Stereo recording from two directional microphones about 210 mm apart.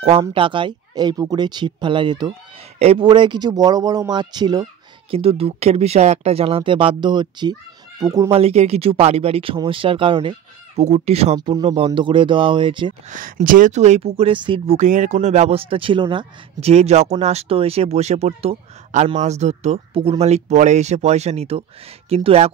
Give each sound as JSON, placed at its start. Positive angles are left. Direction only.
{"t": 0.2, "sound": "speech", "side_deg": -25}
{"t": 8.3, "sound": "speech", "side_deg": -30}
{"t": 11.3, "sound": "speech", "side_deg": -20}
{"t": 13.1, "sound": "speech", "side_deg": -40}
{"t": 14.8, "sound": "speech", "side_deg": -35}